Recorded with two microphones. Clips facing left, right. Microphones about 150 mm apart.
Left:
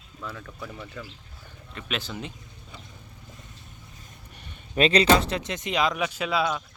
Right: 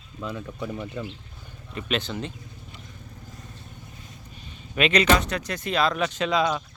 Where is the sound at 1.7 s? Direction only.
5° left (ahead or behind).